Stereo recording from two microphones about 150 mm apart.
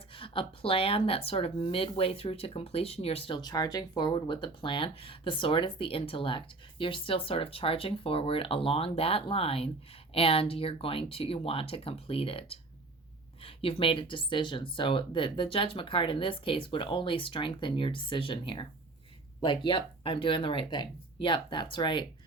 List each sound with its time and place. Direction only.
0.1 s speech: 35° left (ahead or behind)